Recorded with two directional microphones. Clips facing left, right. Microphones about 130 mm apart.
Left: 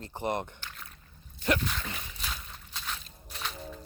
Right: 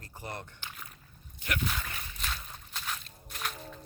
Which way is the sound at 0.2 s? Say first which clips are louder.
Left 10 dB; 20° left (ahead or behind).